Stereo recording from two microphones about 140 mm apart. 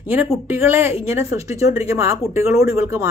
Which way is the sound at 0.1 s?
10° right (ahead or behind).